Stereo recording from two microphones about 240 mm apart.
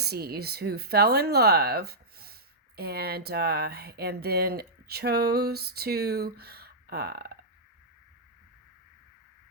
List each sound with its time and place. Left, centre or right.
0.0 s speech: right